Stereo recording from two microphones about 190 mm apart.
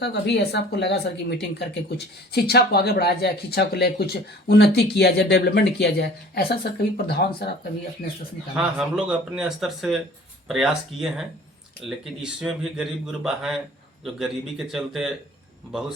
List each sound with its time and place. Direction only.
0.0 s speech: 65° left (ahead or behind)
8.5 s speech: 5° right (ahead or behind)
14.7 s speech: centre (ahead or behind)